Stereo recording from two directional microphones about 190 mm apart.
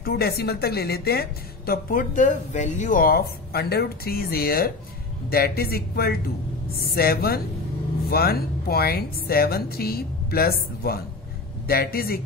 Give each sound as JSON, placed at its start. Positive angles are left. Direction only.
{"t": 0.0, "sound": "a woman's voice", "side_deg": 55}